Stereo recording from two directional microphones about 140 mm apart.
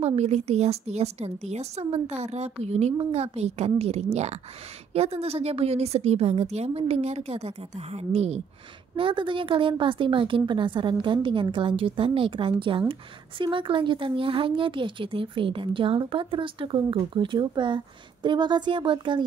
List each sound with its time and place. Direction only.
0.0 s a woman's voice: 50° right (ahead or behind)
8.9 s speech: 35° right (ahead or behind)